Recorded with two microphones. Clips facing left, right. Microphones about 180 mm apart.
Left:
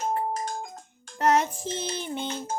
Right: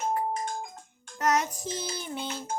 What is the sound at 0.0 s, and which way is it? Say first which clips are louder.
Music: left 1 dB; 35° left (ahead or behind).